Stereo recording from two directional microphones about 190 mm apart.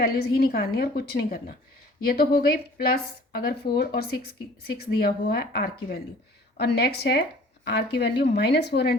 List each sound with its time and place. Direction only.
0.0 s a woman's voice: 55° left (ahead or behind)